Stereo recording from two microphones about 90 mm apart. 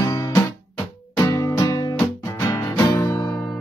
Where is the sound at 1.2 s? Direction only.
35° left (ahead or behind).